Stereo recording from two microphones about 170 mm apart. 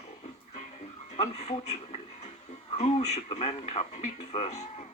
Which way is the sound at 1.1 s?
40° left (ahead or behind).